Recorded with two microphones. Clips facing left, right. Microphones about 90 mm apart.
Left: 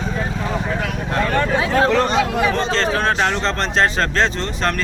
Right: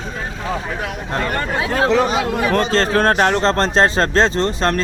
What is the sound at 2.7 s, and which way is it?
Speech, 40° right (ahead or behind).